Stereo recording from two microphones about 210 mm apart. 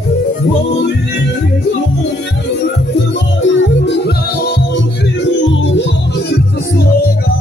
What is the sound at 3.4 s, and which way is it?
Music, 60° left (ahead or behind).